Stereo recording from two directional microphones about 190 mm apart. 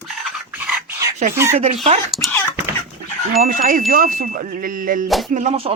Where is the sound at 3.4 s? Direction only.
45° right (ahead or behind).